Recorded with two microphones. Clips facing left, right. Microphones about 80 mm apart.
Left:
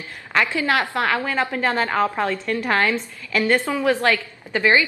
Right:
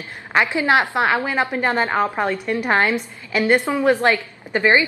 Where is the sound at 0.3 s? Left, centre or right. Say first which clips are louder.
Right 3 dB; centre.